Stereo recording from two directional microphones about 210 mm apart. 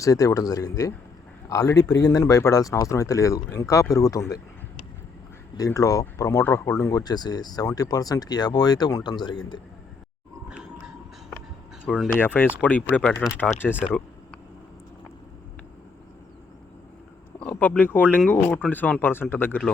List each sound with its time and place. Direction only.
0.0 s speech: 15° left (ahead or behind)
5.5 s speech: 15° left (ahead or behind)
11.9 s speech: 5° left (ahead or behind)
17.4 s speech: 10° left (ahead or behind)